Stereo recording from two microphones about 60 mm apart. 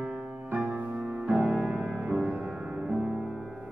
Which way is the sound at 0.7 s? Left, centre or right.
Right.